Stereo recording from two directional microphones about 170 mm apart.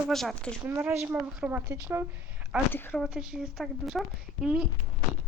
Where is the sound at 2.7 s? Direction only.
10° left (ahead or behind).